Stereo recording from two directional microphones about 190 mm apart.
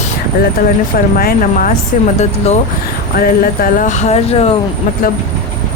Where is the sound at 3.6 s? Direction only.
40° left (ahead or behind).